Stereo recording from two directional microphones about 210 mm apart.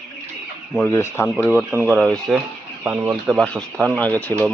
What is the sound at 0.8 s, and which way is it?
Speech, 10° left (ahead or behind).